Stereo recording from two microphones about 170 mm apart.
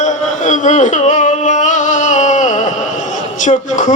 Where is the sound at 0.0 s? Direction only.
45° left (ahead or behind).